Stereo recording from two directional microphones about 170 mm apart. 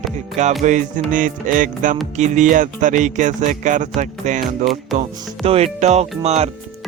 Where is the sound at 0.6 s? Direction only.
50° right (ahead or behind).